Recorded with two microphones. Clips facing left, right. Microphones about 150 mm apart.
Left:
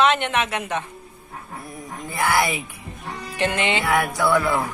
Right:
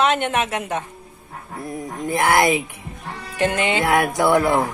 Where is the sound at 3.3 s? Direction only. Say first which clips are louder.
Right 3 dB; 40° right (ahead or behind).